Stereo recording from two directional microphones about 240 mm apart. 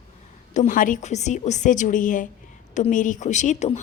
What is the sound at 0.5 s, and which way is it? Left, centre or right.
Speech, left.